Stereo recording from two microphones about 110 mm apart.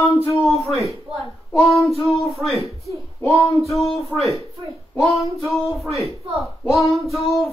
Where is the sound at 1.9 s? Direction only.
Centre (ahead or behind).